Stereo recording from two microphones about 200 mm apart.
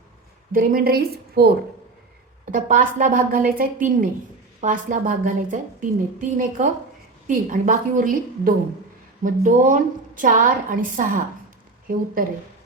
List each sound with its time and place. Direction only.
0.5 s a woman's voice: 45° right (ahead or behind)
2.5 s a woman's voice: 40° right (ahead or behind)